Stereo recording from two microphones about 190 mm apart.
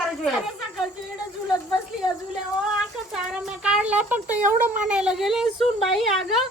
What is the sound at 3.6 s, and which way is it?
Speech, 5° right (ahead or behind).